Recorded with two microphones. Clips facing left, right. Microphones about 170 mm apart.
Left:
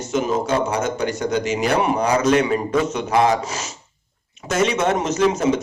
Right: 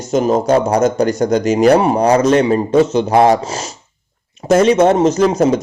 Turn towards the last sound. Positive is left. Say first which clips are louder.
# right 6 dB
turn(degrees=-35)  # may be behind; listen again after turning